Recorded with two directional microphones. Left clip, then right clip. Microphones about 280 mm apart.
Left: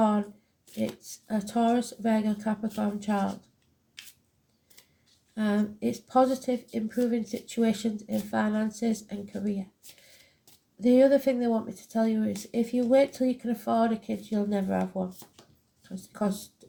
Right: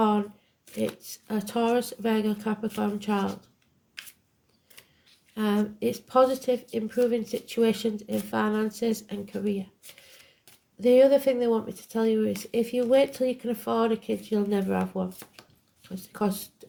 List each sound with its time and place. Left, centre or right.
0.8 s speech: right
5.3 s speech: right
10.8 s speech: right